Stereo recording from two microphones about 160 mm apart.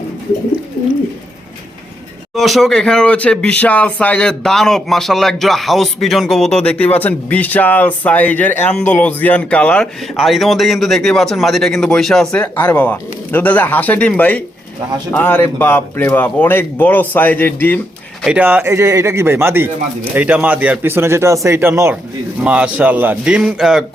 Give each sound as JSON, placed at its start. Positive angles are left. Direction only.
{"t": 2.3, "sound": "speech", "side_deg": 0}
{"t": 18.2, "sound": "speech", "side_deg": -5}